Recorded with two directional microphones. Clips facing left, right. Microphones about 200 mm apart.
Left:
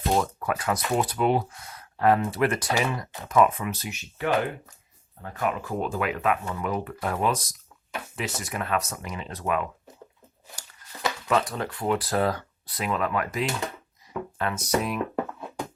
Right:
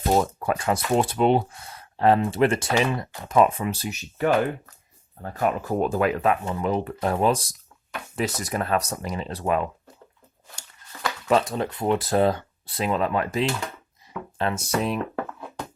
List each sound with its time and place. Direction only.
0.1 s speech: 30° right (ahead or behind)
11.3 s speech: 25° right (ahead or behind)